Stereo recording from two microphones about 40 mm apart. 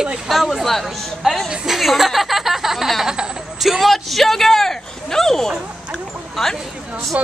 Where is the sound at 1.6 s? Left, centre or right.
Centre.